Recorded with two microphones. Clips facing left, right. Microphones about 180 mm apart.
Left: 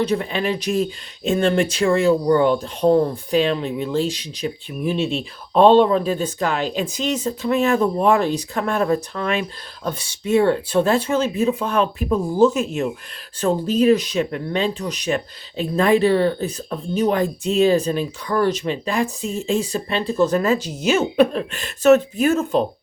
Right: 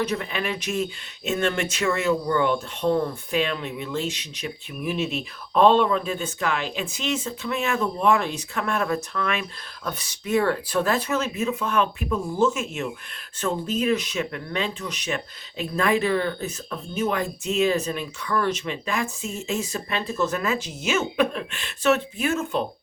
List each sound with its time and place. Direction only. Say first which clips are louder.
0.0 s speech: left 6 dB; 30° left (ahead or behind)